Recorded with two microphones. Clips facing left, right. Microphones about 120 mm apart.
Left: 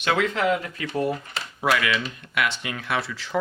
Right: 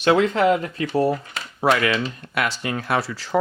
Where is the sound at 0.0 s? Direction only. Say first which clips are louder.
Right 6 dB; 35° right (ahead or behind).